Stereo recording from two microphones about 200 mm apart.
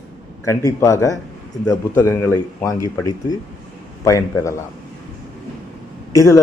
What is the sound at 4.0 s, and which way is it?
Speech, 15° left (ahead or behind).